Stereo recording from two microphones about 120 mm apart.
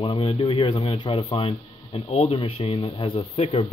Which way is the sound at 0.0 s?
45° left (ahead or behind).